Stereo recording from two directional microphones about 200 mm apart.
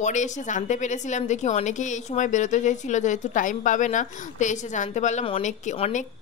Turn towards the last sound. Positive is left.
turn(degrees=35)  # may be behind; listen again after turning